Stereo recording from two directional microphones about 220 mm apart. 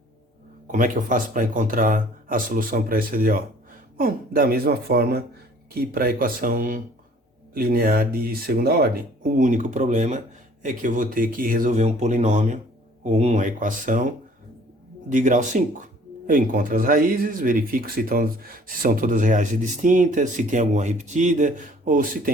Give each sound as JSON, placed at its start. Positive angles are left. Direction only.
{"t": 0.7, "sound": "speech", "side_deg": -35}
{"t": 15.1, "sound": "speech", "side_deg": -35}